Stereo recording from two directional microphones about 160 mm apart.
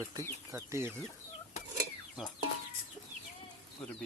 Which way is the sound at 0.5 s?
15° right (ahead or behind).